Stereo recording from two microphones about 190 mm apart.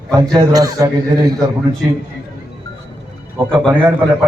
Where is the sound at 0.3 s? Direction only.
20° right (ahead or behind).